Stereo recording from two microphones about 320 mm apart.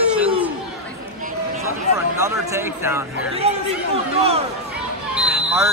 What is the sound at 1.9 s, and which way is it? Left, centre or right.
Speech, centre.